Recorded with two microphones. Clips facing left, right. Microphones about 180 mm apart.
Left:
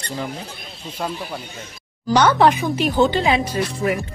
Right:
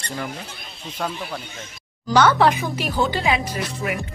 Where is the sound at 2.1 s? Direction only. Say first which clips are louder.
Left 1 dB; 15° left (ahead or behind).